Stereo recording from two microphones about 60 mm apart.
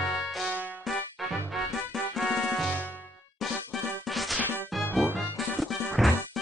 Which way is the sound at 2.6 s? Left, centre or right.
Left.